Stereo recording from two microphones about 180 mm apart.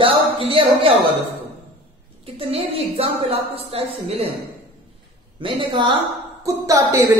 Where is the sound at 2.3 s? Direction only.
35° right (ahead or behind).